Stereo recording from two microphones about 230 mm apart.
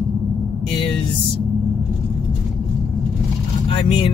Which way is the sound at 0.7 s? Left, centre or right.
Left.